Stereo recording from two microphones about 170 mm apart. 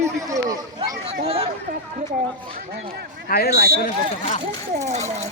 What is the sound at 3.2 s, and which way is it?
Speech, 65° left (ahead or behind).